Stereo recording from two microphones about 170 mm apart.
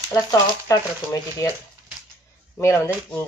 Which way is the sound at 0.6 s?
20° left (ahead or behind).